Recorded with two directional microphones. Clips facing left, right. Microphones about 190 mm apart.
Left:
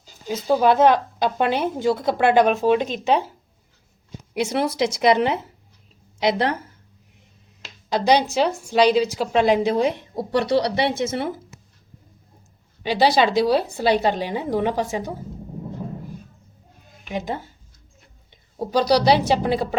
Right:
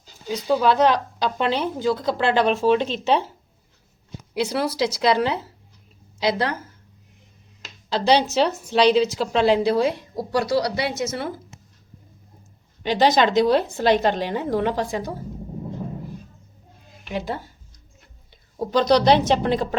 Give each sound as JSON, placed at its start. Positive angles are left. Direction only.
{"t": 0.3, "sound": "a woman's voice", "side_deg": 20}
{"t": 4.4, "sound": "a woman's voice", "side_deg": 25}
{"t": 7.9, "sound": "a woman's voice", "side_deg": 15}
{"t": 10.4, "sound": "a woman's voice", "side_deg": 30}
{"t": 12.8, "sound": "a woman's voice", "side_deg": 10}
{"t": 17.1, "sound": "a woman's voice", "side_deg": 15}
{"t": 18.6, "sound": "a woman's voice", "side_deg": 10}